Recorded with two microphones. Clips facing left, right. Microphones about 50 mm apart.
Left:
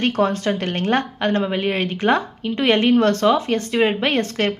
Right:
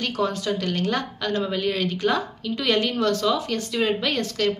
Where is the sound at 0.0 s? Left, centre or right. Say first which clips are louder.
Left 6 dB; left.